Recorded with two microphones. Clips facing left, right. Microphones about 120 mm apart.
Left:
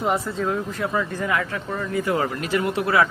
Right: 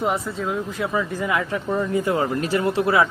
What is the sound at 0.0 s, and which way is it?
Speech, centre (ahead or behind).